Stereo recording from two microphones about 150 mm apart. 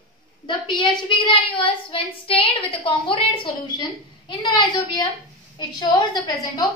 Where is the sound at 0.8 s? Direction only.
30° left (ahead or behind).